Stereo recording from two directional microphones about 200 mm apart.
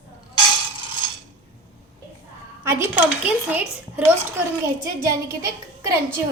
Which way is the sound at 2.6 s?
10° right (ahead or behind).